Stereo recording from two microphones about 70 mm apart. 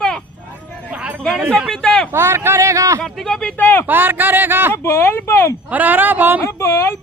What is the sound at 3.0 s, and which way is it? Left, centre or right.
Speech, centre.